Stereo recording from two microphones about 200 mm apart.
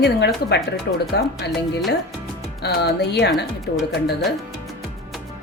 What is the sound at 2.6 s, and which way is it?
Speech, 55° left (ahead or behind).